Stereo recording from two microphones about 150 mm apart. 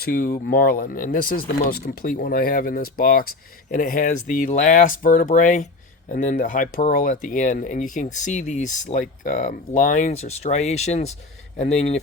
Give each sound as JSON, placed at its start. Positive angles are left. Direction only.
{"t": 0.0, "sound": "speech", "side_deg": 80}